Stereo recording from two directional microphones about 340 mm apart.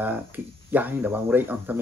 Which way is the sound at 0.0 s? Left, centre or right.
Centre.